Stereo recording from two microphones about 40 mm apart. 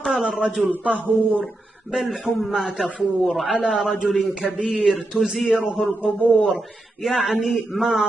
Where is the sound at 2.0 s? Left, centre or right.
Centre.